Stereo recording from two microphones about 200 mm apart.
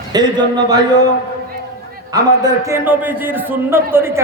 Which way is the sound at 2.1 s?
15° right (ahead or behind).